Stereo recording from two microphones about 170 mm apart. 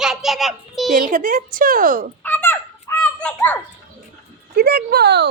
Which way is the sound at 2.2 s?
10° left (ahead or behind).